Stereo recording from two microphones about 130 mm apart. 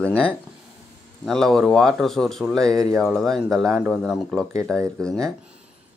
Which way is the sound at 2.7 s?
25° right (ahead or behind).